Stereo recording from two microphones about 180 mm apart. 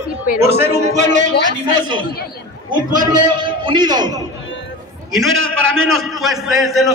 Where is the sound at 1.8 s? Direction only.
25° right (ahead or behind).